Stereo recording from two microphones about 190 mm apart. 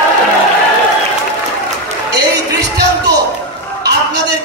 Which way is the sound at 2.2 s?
60° right (ahead or behind).